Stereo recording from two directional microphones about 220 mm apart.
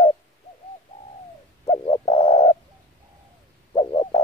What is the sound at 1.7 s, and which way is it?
Bird, 15° left (ahead or behind).